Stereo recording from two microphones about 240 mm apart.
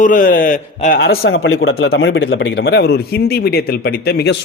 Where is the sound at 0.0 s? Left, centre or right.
Left.